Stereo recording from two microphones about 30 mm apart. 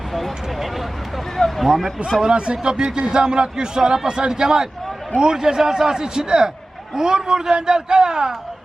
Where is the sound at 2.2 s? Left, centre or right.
Right.